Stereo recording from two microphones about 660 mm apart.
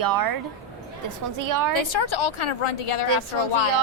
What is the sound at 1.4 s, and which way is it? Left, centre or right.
Speech, right.